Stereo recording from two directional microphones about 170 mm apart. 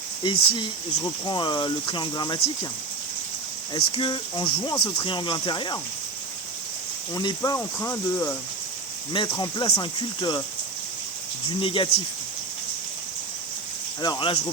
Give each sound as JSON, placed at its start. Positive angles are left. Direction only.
{"t": 0.2, "sound": "speech", "side_deg": 25}
{"t": 3.8, "sound": "speech", "side_deg": 30}
{"t": 7.1, "sound": "speech", "side_deg": 25}
{"t": 9.4, "sound": "speech", "side_deg": 25}
{"t": 11.4, "sound": "speech", "side_deg": 30}
{"t": 14.0, "sound": "speech", "side_deg": 25}